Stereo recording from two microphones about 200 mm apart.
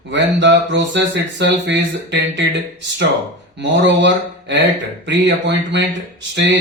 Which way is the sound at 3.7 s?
60° right (ahead or behind).